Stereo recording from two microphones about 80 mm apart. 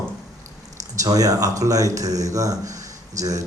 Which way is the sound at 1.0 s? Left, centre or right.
Right.